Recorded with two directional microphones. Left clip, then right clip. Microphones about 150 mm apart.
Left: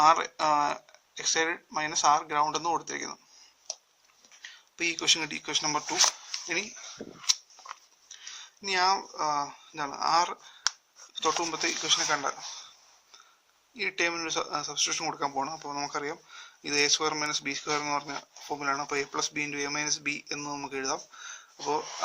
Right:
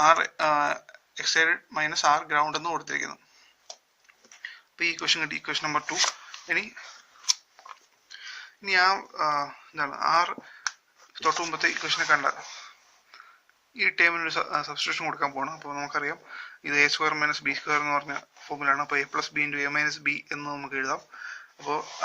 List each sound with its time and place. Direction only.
0.0 s speech: 40° left (ahead or behind)
4.4 s a sound: 65° left (ahead or behind)
4.9 s speech: 55° left (ahead or behind)
8.2 s speech: 65° left (ahead or behind)
11.5 s speech: 45° left (ahead or behind)
13.7 s speech: 45° left (ahead or behind)
15.2 s speech: 65° left (ahead or behind)